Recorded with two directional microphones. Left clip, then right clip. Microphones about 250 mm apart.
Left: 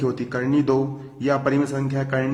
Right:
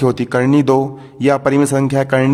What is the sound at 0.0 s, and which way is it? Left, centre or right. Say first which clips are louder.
A man's voice: right 9 dB; right.